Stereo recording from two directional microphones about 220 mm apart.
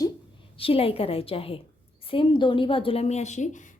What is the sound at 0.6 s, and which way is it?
A woman's voice, 25° left (ahead or behind).